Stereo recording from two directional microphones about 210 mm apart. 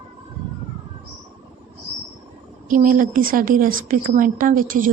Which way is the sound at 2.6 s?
40° right (ahead or behind).